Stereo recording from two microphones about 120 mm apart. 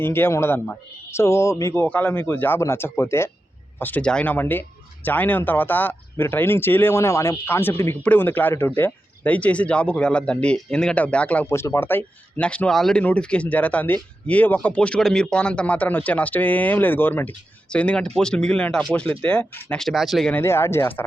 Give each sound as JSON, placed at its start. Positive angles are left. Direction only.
{"t": 0.0, "sound": "speech", "side_deg": 20}
{"t": 11.5, "sound": "speech", "side_deg": 20}
{"t": 20.3, "sound": "speech", "side_deg": 20}